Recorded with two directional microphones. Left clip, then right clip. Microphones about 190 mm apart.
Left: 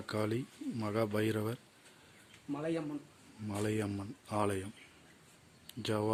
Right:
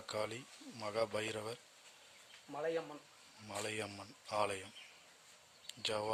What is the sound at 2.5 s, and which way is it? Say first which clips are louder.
Speech: left 2 dB; 35° right (ahead or behind).